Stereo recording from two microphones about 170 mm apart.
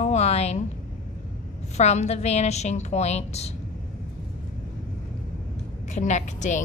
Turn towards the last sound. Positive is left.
turn(degrees=45)  # may be behind; listen again after turning